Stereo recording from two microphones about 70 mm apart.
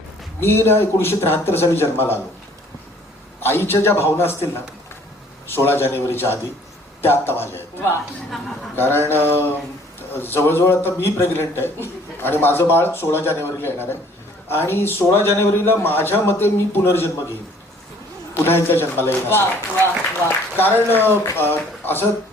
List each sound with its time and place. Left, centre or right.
0.3 s a man's voice: left
3.4 s a man's voice: left
5.5 s a man's voice: left
18.7 s a man's voice: left